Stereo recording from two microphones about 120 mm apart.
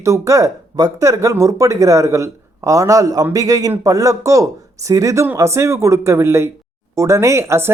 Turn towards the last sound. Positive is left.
turn(degrees=-20)  # may be behind; listen again after turning